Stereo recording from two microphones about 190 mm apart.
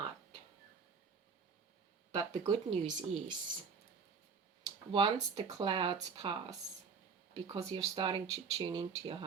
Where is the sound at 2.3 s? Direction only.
20° right (ahead or behind).